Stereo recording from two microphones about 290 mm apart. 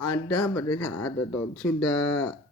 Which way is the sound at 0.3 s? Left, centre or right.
Centre.